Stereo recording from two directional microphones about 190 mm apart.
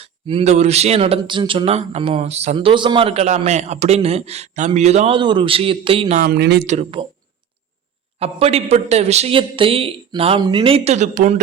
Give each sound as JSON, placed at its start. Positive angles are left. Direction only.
{"t": 0.0, "sound": "speech", "side_deg": -30}
{"t": 6.1, "sound": "speech", "side_deg": -55}
{"t": 6.7, "sound": "speech", "side_deg": -30}
{"t": 8.2, "sound": "speech", "side_deg": -30}